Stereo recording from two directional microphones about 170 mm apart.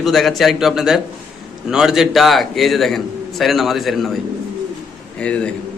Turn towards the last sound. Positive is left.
turn(degrees=5)  # may be behind; listen again after turning